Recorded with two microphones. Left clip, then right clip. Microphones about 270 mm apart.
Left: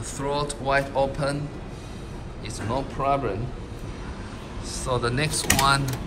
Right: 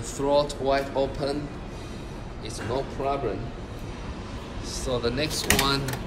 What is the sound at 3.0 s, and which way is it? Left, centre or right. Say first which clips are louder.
Speech: left 5 dB; left.